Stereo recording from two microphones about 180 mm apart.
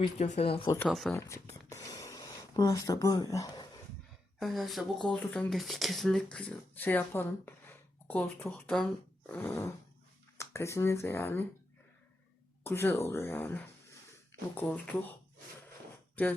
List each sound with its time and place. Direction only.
0.2 s speech: 35° left (ahead or behind)
0.9 s speech: centre (ahead or behind)
1.7 s a sound: 20° left (ahead or behind)
4.4 s speech: centre (ahead or behind)
12.6 s speech: 15° left (ahead or behind)